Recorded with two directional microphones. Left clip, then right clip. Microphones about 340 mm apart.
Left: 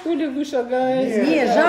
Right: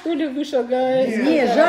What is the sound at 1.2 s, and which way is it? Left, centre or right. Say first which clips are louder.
Speech: left 1 dB; centre.